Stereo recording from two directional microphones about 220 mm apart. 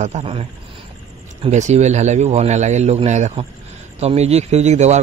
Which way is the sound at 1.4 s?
30° right (ahead or behind).